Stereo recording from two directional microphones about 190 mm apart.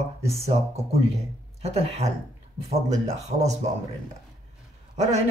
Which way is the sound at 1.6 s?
35° right (ahead or behind).